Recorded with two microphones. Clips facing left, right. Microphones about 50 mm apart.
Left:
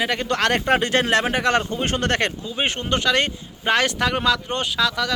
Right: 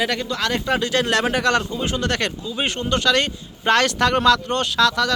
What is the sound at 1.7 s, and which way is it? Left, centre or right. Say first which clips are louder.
Speech: left 1 dB; left.